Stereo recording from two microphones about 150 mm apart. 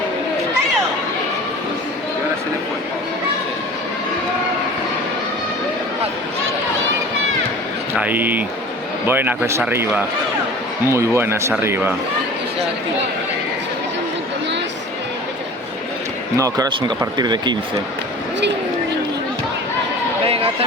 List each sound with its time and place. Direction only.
7.9 s speech: 10° right (ahead or behind)
16.4 s speech: 25° right (ahead or behind)
20.2 s a sound: 40° right (ahead or behind)